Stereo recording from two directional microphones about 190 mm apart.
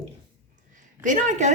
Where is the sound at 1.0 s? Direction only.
40° right (ahead or behind).